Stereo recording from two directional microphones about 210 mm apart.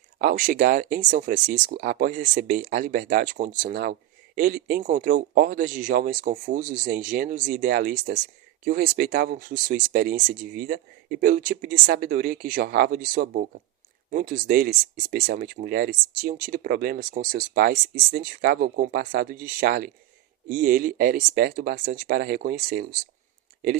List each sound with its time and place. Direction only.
0.2 s speech: 40° right (ahead or behind)